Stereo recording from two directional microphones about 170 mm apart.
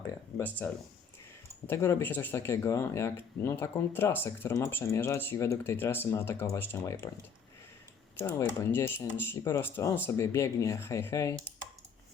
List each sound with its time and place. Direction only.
0.3 s speech: 10° left (ahead or behind)
8.2 s speech: 15° left (ahead or behind)